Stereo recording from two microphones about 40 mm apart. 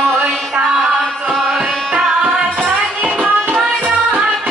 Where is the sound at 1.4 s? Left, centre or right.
Centre.